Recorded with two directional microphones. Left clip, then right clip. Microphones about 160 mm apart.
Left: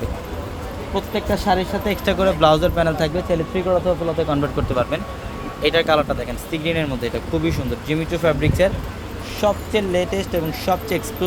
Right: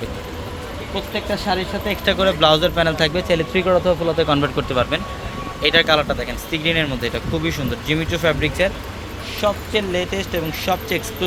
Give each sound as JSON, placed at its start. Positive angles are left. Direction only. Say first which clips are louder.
{"t": 0.9, "sound": "speech", "louder": "left 2 dB", "side_deg": 30}
{"t": 2.0, "sound": "speech", "louder": "right 1 dB", "side_deg": 10}
{"t": 3.2, "sound": "speech", "louder": "right 3 dB", "side_deg": -20}
{"t": 4.7, "sound": "speech", "louder": "right 1 dB", "side_deg": 5}